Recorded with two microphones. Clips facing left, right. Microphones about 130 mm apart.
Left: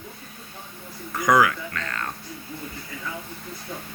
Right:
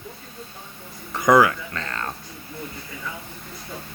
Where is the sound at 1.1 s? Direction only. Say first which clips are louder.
Right 3 dB; 25° right (ahead or behind).